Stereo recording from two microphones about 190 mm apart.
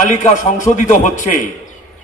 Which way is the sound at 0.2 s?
40° left (ahead or behind).